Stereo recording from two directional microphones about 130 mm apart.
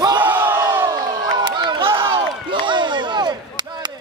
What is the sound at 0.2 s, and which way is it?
Crowd, 15° right (ahead or behind).